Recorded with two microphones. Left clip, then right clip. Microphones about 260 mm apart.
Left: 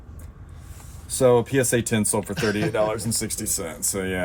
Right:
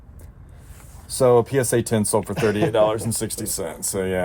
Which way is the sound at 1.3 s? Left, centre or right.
Centre.